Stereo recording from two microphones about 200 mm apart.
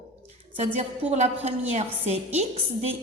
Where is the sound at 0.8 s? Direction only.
35° right (ahead or behind).